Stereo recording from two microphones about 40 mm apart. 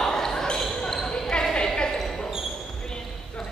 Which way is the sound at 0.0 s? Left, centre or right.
Centre.